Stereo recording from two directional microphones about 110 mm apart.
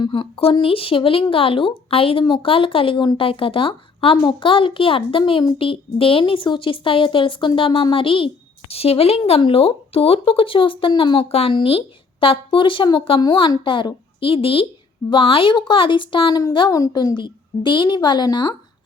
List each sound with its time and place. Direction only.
0.0 s a woman's voice: 50° left (ahead or behind)
8.7 s a woman's voice: 65° left (ahead or behind)
11.3 s a woman's voice: 65° left (ahead or behind); by 18.5 s 40° left (ahead or behind)